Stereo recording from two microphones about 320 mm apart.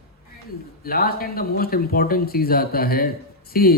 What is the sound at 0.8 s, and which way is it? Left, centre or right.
Speech, left.